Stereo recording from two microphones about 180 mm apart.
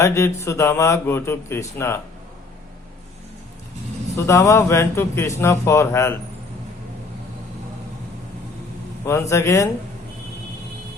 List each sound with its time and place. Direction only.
0.0 s speech: 15° left (ahead or behind)
4.3 s speech: 15° left (ahead or behind)
9.0 s speech: 15° left (ahead or behind)